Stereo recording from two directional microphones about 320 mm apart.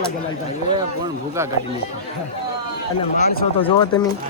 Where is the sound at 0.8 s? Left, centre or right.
Centre.